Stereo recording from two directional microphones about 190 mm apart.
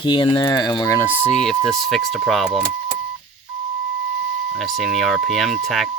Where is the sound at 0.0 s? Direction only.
25° left (ahead or behind).